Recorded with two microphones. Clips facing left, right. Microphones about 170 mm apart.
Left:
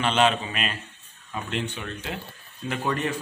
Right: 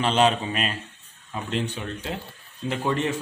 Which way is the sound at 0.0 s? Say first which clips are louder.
Right 1 dB; 35° right (ahead or behind).